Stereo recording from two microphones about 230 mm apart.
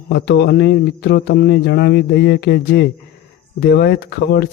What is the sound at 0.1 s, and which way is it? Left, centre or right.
Speech, left.